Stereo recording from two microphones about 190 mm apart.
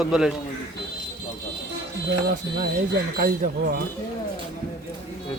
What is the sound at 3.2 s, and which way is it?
Speech, 50° right (ahead or behind).